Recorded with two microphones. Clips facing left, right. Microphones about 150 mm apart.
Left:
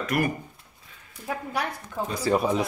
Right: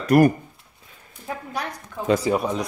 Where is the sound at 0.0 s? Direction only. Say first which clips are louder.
Right 10 dB; 40° right (ahead or behind).